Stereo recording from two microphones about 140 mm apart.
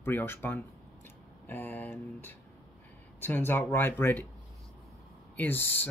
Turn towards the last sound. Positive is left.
turn(degrees=15)  # may be behind; listen again after turning